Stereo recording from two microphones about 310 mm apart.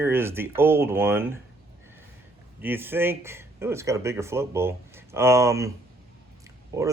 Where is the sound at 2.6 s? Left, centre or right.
Centre.